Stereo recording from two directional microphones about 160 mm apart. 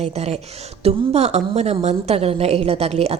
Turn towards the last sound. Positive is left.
turn(degrees=-40)  # may be behind; listen again after turning